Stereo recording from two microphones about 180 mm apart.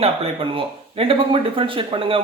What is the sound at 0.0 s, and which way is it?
Speech, 30° right (ahead or behind).